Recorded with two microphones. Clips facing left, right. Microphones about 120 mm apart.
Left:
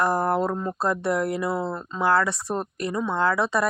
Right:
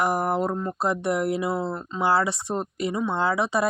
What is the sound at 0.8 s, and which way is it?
Speech, 20° right (ahead or behind).